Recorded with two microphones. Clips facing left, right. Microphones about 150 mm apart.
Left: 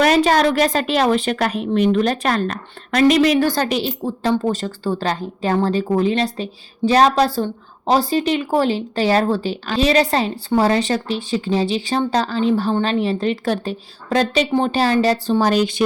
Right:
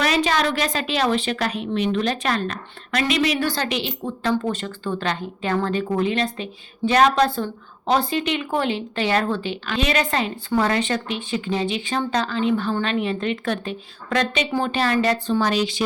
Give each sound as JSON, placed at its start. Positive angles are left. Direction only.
{"t": 0.0, "sound": "a woman's voice", "side_deg": 45}